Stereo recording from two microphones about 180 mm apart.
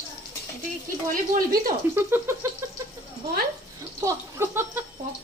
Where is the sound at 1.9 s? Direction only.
15° right (ahead or behind).